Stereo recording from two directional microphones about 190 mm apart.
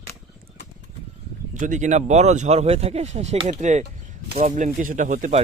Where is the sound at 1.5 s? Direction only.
40° right (ahead or behind).